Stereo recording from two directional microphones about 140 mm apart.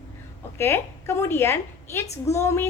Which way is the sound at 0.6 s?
20° left (ahead or behind).